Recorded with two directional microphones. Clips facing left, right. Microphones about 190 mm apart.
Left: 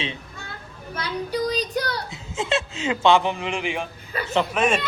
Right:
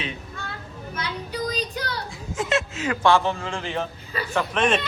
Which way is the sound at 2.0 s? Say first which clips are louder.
Even; 25° left (ahead or behind).